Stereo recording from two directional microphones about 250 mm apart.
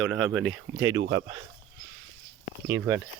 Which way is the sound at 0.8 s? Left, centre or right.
Centre.